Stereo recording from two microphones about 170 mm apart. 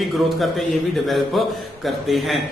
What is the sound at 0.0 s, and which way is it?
A man's voice, centre (ahead or behind).